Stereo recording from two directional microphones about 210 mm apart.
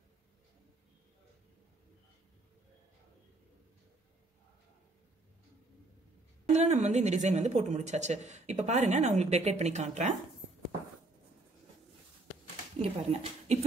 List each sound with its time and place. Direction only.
6.5 s speech: 35° right (ahead or behind)
12.7 s speech: 30° right (ahead or behind)